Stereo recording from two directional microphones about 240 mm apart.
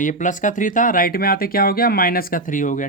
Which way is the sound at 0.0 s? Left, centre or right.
Left.